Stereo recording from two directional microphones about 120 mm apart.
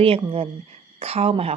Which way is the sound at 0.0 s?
50° right (ahead or behind).